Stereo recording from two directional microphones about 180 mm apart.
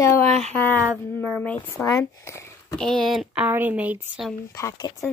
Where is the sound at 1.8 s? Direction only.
20° left (ahead or behind).